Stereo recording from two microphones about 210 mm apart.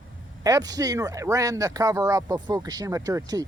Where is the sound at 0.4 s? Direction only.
15° right (ahead or behind).